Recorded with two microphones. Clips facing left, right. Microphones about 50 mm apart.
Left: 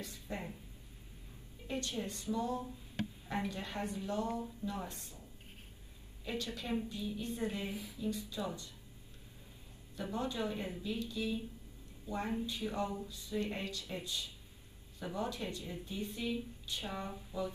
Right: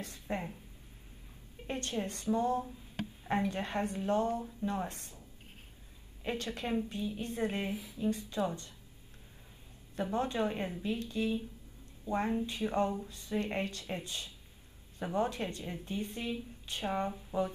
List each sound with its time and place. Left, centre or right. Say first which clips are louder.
0.0 s a sound: right 5 dB; right
1.7 s a woman's voice: right 3 dB; right
6.2 s a woman's voice: right 4 dB; right
10.1 s a woman's voice: right 4 dB; right
12.4 s a woman's voice: right 6 dB; right
17.3 s music: right 6 dB; right